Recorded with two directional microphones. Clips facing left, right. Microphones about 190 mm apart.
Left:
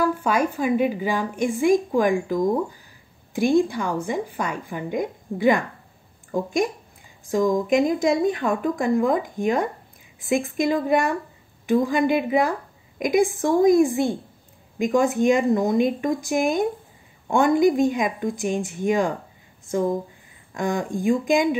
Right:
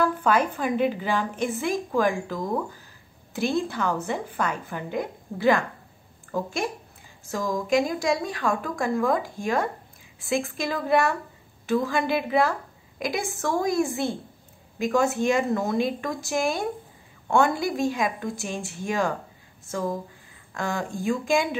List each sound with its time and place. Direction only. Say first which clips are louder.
0.0 s a woman's voice: left 1 dB; 10° left (ahead or behind)
20.5 s a woman's voice: left 4 dB; 15° left (ahead or behind)